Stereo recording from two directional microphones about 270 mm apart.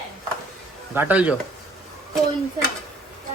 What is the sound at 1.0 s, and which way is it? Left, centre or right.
Speech, centre.